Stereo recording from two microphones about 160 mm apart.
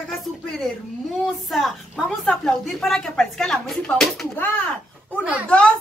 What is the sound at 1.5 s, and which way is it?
A woman's voice, centre (ahead or behind).